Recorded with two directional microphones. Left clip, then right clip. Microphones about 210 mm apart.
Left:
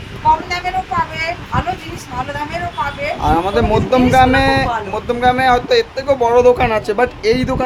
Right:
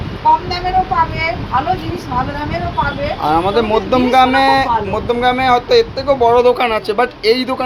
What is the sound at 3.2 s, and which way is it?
Speech, 15° left (ahead or behind).